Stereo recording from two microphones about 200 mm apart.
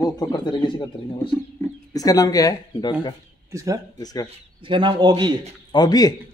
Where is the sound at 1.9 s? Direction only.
20° left (ahead or behind).